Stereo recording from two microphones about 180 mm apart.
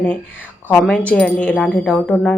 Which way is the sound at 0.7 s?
5° left (ahead or behind).